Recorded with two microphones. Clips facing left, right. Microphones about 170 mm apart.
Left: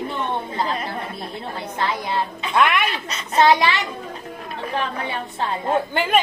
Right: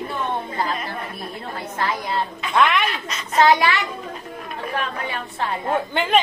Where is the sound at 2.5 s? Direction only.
10° left (ahead or behind).